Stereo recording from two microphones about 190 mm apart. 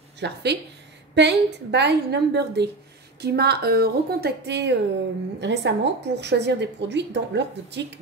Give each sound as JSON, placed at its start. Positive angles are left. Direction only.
{"t": 0.2, "sound": "a woman's voice", "side_deg": -60}